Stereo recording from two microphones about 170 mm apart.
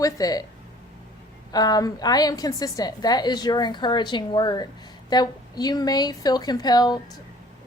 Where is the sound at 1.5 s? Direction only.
25° left (ahead or behind).